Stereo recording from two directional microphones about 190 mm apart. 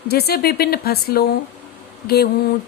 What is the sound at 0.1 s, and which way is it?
Speech, 55° left (ahead or behind).